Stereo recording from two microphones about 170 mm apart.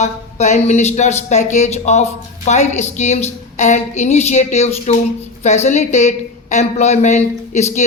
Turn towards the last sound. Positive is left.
turn(degrees=40)  # may be behind; listen again after turning